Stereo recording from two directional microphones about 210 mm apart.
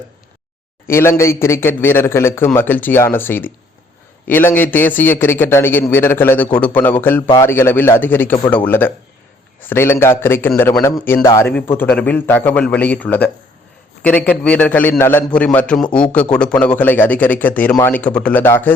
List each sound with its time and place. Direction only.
0.9 s a man's voice: 10° left (ahead or behind)
7.5 s a man's voice: 10° left (ahead or behind)